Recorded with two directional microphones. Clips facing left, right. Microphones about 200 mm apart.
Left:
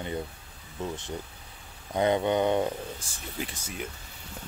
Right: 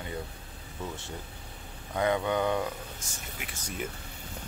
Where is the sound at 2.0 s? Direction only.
25° left (ahead or behind).